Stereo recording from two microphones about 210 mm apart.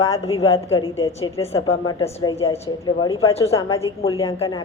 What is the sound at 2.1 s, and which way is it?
A woman's voice, 30° left (ahead or behind).